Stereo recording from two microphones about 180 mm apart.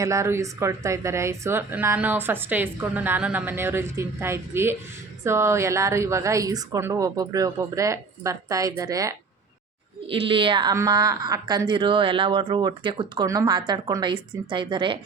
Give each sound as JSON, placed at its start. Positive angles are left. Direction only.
{"t": 0.0, "sound": "speech", "side_deg": -15}
{"t": 10.1, "sound": "a woman's voice", "side_deg": -30}